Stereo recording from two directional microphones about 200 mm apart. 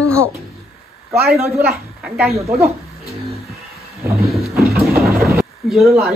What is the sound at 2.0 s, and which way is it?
Speech, 5° right (ahead or behind).